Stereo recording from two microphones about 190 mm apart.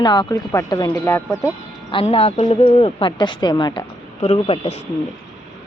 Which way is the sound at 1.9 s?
30° left (ahead or behind).